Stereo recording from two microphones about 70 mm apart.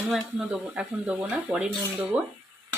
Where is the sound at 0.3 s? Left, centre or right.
Centre.